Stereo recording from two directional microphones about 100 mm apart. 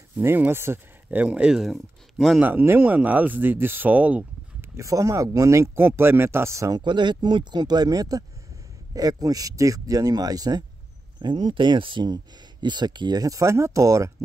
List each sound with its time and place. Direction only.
0.2 s speech: 20° right (ahead or behind)
1.2 s speech: 10° right (ahead or behind)
2.4 s speech: 20° right (ahead or behind)
4.7 s speech: 35° right (ahead or behind)
6.8 s speech: 50° right (ahead or behind)
11.1 s speech: 50° right (ahead or behind); by 14.1 s 30° right (ahead or behind)